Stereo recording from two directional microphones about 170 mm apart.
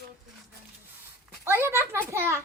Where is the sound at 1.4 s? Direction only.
15° right (ahead or behind).